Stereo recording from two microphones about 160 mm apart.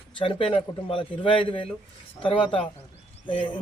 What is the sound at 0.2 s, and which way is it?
Speech, 35° left (ahead or behind).